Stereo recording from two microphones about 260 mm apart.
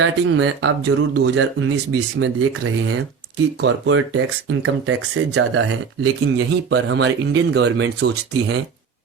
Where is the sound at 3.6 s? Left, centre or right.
Right.